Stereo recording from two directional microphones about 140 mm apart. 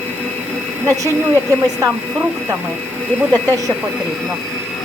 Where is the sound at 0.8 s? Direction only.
20° right (ahead or behind).